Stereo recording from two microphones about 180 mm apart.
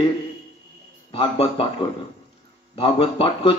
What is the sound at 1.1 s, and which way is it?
Speech, 30° left (ahead or behind).